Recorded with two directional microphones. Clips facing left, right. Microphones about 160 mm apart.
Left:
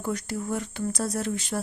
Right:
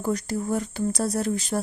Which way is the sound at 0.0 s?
40° right (ahead or behind).